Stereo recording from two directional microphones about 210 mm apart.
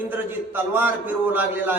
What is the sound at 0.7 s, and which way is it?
A man's voice, 10° right (ahead or behind).